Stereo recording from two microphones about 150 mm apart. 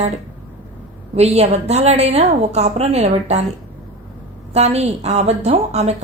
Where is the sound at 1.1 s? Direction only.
45° right (ahead or behind).